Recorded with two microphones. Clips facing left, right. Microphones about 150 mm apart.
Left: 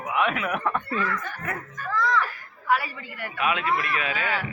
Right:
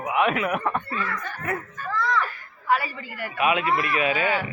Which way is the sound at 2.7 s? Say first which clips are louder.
Right 1 dB; centre (ahead or behind).